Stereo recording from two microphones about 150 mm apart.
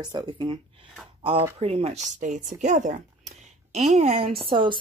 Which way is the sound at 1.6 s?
45° right (ahead or behind).